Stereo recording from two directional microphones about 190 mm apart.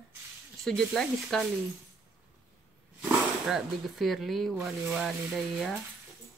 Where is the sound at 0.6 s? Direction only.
Centre (ahead or behind).